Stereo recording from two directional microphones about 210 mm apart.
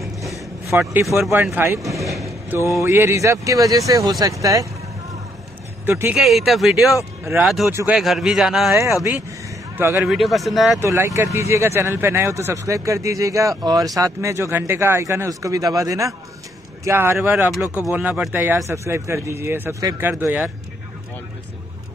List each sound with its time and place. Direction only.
0.2 s a sound: 15° right (ahead or behind)
1.3 s speech: 10° right (ahead or behind)
2.2 s a sound: 15° right (ahead or behind)
2.8 s speech: 10° right (ahead or behind)
5.9 s speech: 10° right (ahead or behind)
10.1 s speech: centre (ahead or behind)
10.8 s speech: 15° right (ahead or behind)